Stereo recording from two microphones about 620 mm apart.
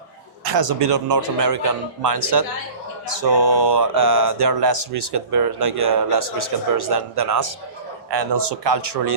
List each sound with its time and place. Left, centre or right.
0.4 s speech: right